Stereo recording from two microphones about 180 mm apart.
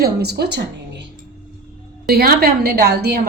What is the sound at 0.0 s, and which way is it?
Speech, 65° right (ahead or behind).